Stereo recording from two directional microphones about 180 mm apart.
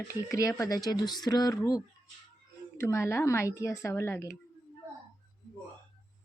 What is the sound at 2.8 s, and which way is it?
A woman's voice, 15° left (ahead or behind).